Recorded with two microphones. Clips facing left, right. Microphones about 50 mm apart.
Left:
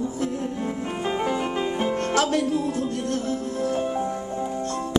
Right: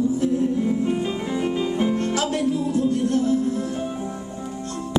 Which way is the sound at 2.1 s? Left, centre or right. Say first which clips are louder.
Left 1 dB; left.